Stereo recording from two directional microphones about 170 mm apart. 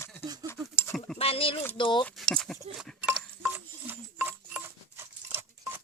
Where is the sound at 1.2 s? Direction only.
35° left (ahead or behind).